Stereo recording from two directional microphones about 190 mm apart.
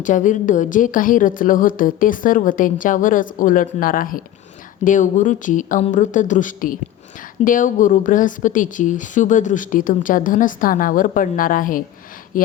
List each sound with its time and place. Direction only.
0.0 s speech: 40° left (ahead or behind)